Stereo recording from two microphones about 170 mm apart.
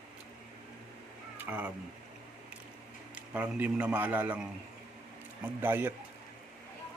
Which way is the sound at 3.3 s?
10° right (ahead or behind).